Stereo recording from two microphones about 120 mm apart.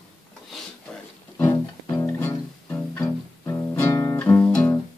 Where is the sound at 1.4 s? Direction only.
25° left (ahead or behind).